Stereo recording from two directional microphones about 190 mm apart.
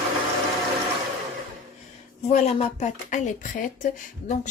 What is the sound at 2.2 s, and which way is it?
Speech, 35° left (ahead or behind).